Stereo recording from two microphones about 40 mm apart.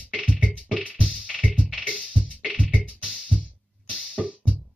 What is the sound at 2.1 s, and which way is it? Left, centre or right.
Music, left.